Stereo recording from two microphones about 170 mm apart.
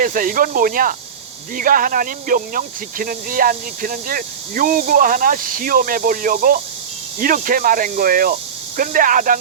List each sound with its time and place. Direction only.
0.0 s speech: 55° right (ahead or behind)